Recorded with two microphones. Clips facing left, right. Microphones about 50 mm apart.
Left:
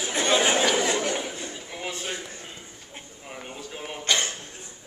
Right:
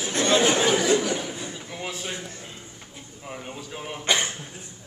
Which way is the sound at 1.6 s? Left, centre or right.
Centre.